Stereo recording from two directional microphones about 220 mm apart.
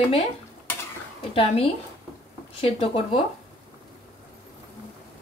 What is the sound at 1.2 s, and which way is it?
Speech, 25° left (ahead or behind).